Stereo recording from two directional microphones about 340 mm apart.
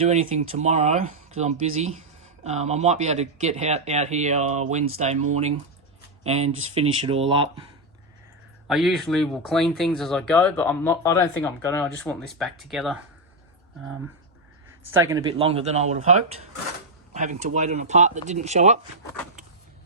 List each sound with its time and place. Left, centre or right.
0.0 s speech: centre
8.6 s speech: centre
15.0 s speech: centre
17.2 s speech: right